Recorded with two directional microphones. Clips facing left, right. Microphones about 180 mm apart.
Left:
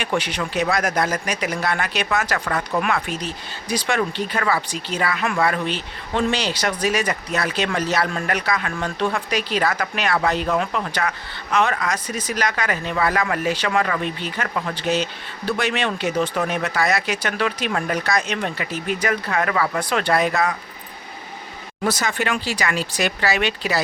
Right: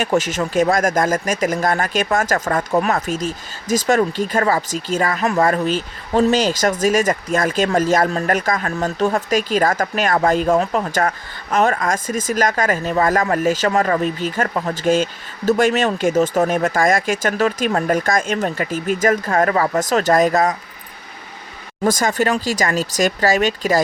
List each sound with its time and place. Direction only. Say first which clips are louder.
0.0 s speech: right 5 dB; 45° right (ahead or behind)
21.8 s speech: right 5 dB; 45° right (ahead or behind)